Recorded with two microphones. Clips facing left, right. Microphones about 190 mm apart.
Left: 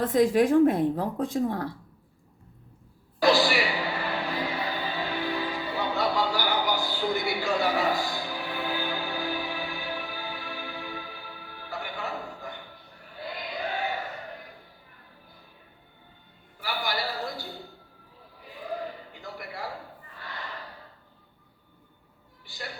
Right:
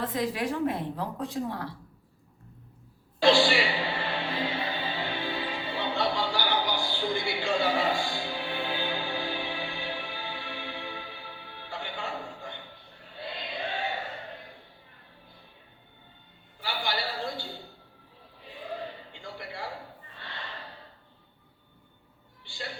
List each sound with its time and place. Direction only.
0.0 s a woman's voice: 45° left (ahead or behind)
3.2 s music: 30° right (ahead or behind)
16.6 s a sound: 25° right (ahead or behind)
22.4 s music: 30° right (ahead or behind)